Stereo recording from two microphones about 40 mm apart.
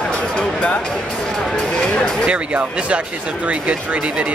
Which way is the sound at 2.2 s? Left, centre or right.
Right.